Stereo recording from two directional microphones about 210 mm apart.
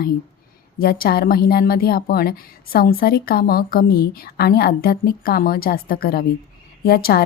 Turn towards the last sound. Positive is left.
turn(degrees=45)  # may be behind; listen again after turning